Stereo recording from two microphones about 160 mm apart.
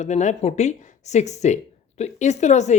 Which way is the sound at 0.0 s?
45° left (ahead or behind).